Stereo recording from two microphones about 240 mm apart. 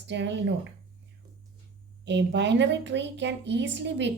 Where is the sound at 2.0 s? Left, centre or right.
Right.